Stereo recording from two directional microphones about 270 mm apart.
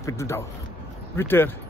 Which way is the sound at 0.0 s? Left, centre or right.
Centre.